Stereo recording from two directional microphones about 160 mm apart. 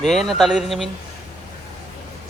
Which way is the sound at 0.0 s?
Centre (ahead or behind).